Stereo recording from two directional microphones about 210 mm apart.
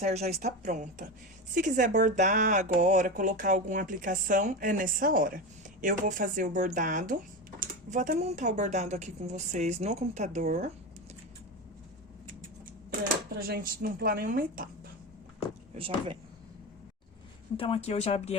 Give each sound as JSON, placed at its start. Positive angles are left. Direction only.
{"t": 0.0, "sound": "speech", "side_deg": -30}
{"t": 13.5, "sound": "a woman's voice", "side_deg": -45}
{"t": 15.7, "sound": "speech", "side_deg": -25}
{"t": 17.6, "sound": "speech", "side_deg": 30}